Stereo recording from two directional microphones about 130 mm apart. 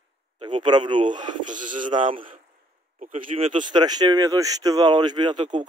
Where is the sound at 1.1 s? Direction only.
75° right (ahead or behind).